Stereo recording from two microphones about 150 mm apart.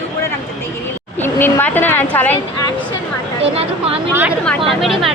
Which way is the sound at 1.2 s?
15° left (ahead or behind).